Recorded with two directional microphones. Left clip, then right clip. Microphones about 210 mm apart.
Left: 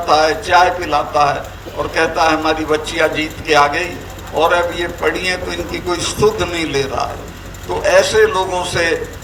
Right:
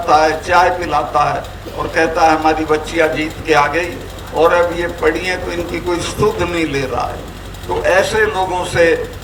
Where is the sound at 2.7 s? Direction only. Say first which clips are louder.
Right 1 dB; 45° left (ahead or behind).